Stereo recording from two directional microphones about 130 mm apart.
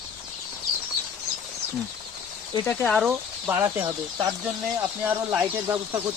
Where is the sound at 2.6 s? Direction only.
15° left (ahead or behind).